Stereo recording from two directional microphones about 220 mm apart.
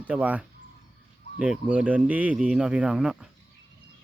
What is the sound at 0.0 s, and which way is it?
Speech, 5° right (ahead or behind).